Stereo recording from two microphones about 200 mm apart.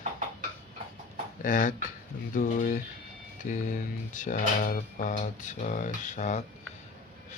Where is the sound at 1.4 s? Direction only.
40° left (ahead or behind).